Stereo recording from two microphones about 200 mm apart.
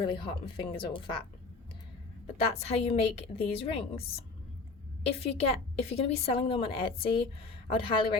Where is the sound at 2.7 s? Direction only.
30° left (ahead or behind).